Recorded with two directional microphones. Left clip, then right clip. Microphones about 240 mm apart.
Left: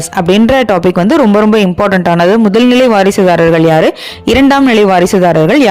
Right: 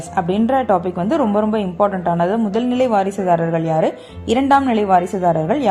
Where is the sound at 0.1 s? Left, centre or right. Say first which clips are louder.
Left 8 dB; left.